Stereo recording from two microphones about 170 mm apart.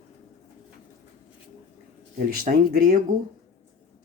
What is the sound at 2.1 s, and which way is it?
Speech, 55° right (ahead or behind).